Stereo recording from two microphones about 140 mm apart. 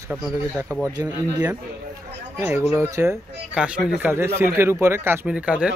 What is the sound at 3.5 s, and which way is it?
A man's voice, 5° right (ahead or behind).